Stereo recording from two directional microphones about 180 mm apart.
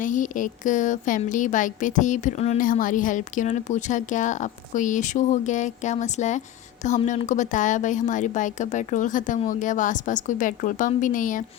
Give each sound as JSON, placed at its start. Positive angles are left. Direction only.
{"t": 0.0, "sound": "speech", "side_deg": 45}